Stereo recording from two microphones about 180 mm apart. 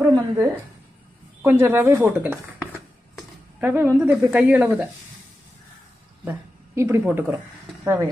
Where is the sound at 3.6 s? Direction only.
10° right (ahead or behind).